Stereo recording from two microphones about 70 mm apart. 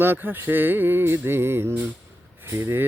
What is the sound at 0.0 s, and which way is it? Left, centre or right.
Speech, right.